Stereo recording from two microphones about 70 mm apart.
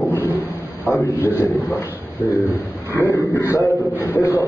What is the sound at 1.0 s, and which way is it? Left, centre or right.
Speech, left.